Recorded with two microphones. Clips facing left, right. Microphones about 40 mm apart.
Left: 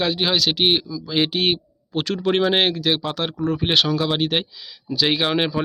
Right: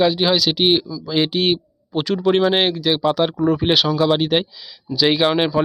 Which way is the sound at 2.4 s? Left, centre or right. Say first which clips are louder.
Right 2 dB; centre.